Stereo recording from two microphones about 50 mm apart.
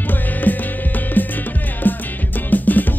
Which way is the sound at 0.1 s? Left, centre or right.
Left.